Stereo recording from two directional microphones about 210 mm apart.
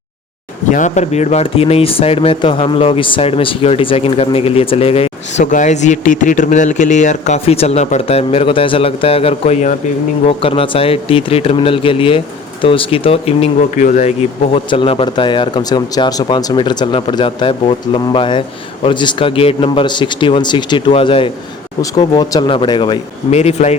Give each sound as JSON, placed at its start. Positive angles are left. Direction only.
{"t": 0.7, "sound": "speech", "side_deg": 35}
{"t": 14.5, "sound": "speech", "side_deg": 25}